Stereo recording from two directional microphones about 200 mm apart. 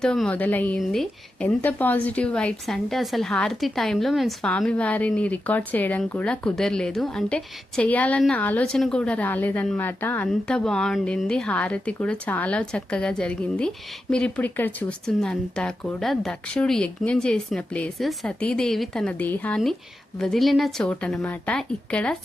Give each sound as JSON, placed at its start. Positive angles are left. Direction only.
{"t": 0.0, "sound": "a woman's voice", "side_deg": 5}